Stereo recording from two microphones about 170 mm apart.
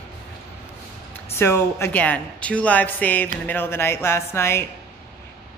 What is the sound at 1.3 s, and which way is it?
A woman's voice, 15° left (ahead or behind).